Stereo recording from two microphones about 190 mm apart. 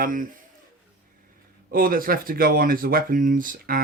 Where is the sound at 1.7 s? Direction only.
50° right (ahead or behind).